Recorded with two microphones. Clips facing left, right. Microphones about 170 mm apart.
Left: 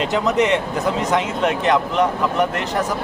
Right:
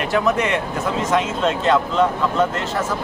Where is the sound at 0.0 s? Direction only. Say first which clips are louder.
Left 1 dB; 20° left (ahead or behind).